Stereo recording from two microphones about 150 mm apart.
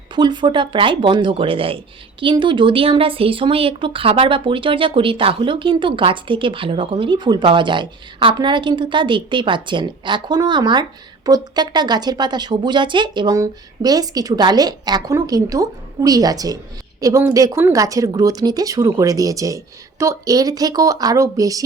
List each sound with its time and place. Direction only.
0.2 s speech: 30° right (ahead or behind)